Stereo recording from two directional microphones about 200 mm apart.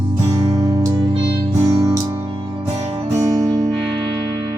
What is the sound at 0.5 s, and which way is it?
Music, 15° right (ahead or behind).